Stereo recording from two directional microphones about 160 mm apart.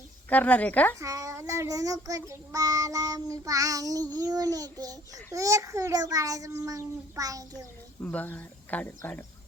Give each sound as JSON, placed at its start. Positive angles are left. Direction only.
{"t": 0.3, "sound": "speech", "side_deg": 10}
{"t": 0.9, "sound": "child singing", "side_deg": -20}
{"t": 8.0, "sound": "speech", "side_deg": 10}